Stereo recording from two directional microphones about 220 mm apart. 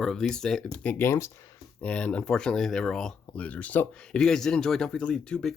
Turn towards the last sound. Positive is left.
turn(degrees=5)  # may be behind; listen again after turning